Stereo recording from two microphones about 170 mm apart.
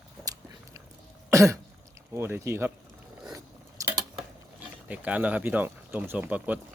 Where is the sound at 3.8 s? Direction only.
20° right (ahead or behind).